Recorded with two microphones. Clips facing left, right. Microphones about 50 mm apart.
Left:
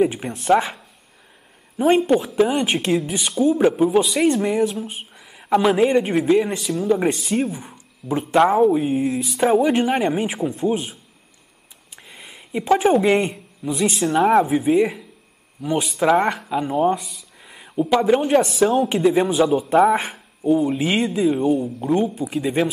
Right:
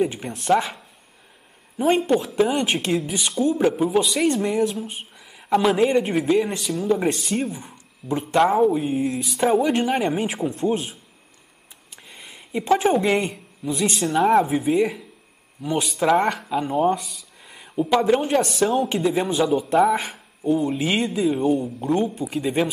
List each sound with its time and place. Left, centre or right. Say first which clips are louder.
0.0 s speech: left 4 dB; centre
1.8 s a man's voice: left 3 dB; centre
11.9 s a sound: left 1 dB; centre
13.0 s a woman's voice: left 3 dB; centre
18.9 s a man's voice: left 5 dB; left
19.2 s speech: left 3 dB; centre